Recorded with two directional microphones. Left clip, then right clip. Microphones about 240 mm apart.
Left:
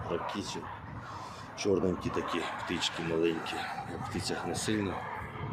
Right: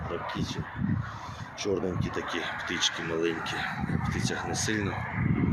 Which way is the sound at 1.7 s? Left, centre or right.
Centre.